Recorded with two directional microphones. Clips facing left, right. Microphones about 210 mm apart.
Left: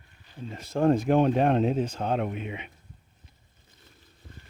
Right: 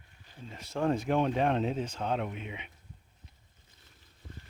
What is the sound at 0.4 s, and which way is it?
Speech, 45° left (ahead or behind).